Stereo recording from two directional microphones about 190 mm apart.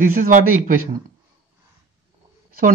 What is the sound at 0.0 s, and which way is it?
Speech, 45° right (ahead or behind).